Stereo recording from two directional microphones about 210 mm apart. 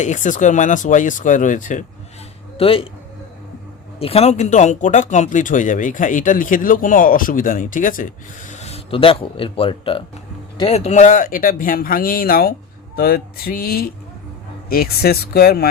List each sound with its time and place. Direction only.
0.0 s speech: 35° left (ahead or behind)
2.6 s speech: 25° left (ahead or behind)
4.0 s speech: 30° left (ahead or behind); by 15.7 s 45° left (ahead or behind)